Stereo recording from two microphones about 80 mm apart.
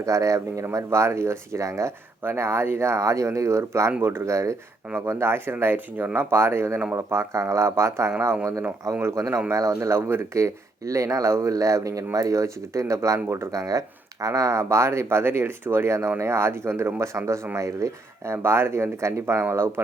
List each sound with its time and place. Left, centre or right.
0.0 s speech: right